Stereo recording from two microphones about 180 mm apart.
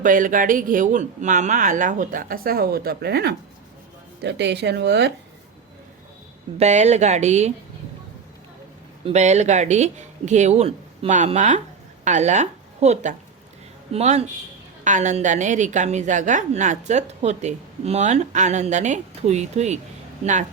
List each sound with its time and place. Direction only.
0.0 s speech: 50° right (ahead or behind); by 5.1 s 70° right (ahead or behind)
6.6 s a woman's voice: 40° right (ahead or behind)
9.0 s a woman's voice: 40° right (ahead or behind)